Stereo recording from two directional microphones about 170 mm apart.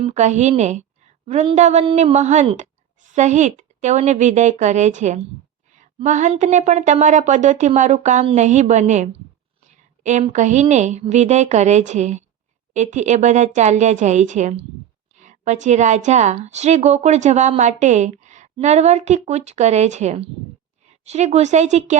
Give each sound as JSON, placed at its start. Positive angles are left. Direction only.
{"t": 0.0, "sound": "a woman's voice", "side_deg": -40}
{"t": 9.6, "sound": "a sound", "side_deg": -45}
{"t": 10.3, "sound": "a woman's voice", "side_deg": -45}